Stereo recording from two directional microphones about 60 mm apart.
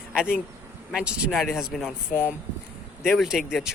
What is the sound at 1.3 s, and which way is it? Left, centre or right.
Speech, centre.